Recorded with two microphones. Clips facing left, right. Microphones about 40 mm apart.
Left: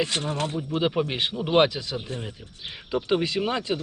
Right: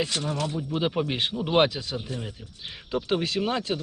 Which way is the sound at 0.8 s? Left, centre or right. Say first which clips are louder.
Left 2 dB; centre.